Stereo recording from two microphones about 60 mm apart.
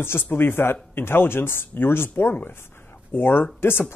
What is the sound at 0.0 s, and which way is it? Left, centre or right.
Speech, left.